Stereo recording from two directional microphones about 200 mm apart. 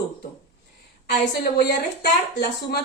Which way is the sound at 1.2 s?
55° left (ahead or behind).